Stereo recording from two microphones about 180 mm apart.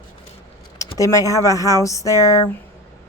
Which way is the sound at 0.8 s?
20° left (ahead or behind).